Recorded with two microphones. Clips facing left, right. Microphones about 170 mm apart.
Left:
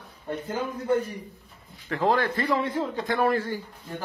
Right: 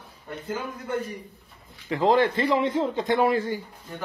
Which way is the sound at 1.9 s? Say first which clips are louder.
Right 3 dB; 15° right (ahead or behind).